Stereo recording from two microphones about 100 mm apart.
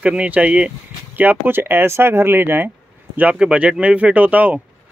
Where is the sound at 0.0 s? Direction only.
10° right (ahead or behind).